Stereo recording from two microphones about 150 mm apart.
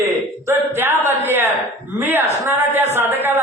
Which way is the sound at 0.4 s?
15° right (ahead or behind).